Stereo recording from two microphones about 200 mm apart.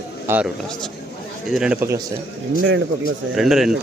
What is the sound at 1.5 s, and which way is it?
Speech, 5° right (ahead or behind).